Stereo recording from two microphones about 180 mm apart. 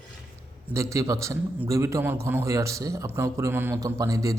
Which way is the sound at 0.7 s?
15° right (ahead or behind).